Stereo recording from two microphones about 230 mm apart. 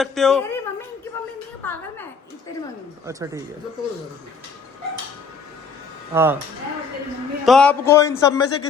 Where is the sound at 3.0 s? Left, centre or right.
Centre.